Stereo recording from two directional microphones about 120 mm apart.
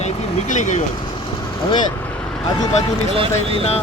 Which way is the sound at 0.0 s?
90° left.